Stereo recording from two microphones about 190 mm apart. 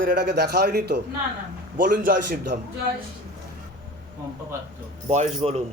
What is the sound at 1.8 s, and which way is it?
Speech, 50° right (ahead or behind).